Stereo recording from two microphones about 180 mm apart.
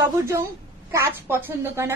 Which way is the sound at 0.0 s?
15° right (ahead or behind).